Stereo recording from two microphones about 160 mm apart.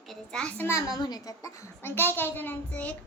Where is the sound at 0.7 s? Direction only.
20° left (ahead or behind).